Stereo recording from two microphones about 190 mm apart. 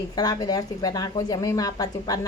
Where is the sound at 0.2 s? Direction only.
20° left (ahead or behind).